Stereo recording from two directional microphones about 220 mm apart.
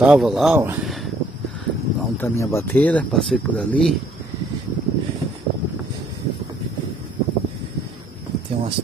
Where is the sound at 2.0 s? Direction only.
10° left (ahead or behind).